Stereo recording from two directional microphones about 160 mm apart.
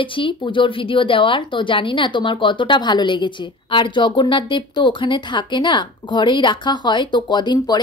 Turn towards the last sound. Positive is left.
turn(degrees=25)  # may be behind; listen again after turning